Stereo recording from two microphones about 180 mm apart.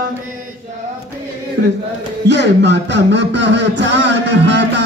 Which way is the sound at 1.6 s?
70° right (ahead or behind).